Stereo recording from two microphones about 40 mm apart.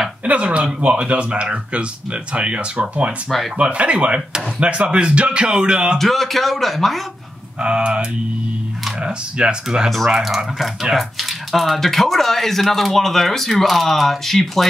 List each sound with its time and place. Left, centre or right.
0.2 s speech: right
5.9 s speech: centre
7.6 s speech: right
9.8 s speech: centre